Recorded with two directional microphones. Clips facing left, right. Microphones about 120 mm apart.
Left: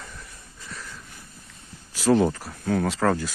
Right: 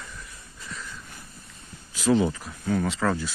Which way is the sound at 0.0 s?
45° left (ahead or behind).